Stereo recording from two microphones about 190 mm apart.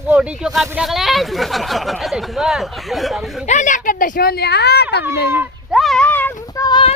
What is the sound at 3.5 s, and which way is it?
Speech, 40° left (ahead or behind).